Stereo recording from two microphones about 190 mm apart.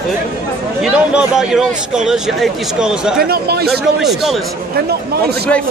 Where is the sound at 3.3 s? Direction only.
55° right (ahead or behind).